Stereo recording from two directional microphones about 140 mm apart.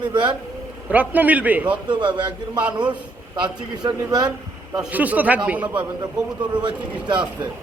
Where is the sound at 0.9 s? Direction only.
10° right (ahead or behind).